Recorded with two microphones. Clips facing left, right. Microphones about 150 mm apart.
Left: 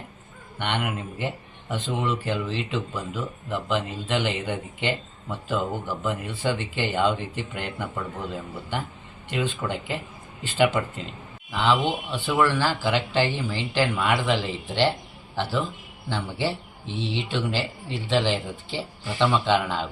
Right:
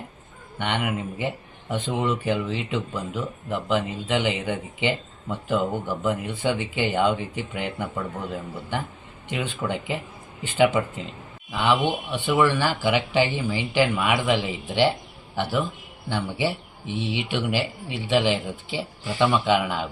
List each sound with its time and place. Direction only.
0.6 s speech: 15° right (ahead or behind)
9.3 s speech: 15° right (ahead or behind)
16.0 s speech: 15° right (ahead or behind)